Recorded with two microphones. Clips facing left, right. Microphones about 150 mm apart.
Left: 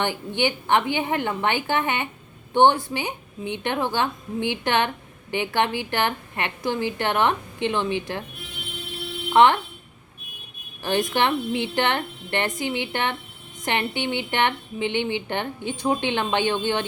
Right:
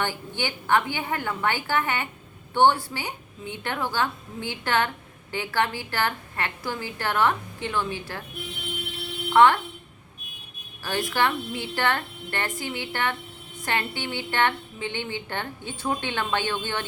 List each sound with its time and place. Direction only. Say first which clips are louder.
0.0 s a woman's voice: left 5 dB; 20° left (ahead or behind)
9.3 s speech: left 1 dB; 20° left (ahead or behind)
10.8 s a woman's voice: left 3 dB; 20° left (ahead or behind)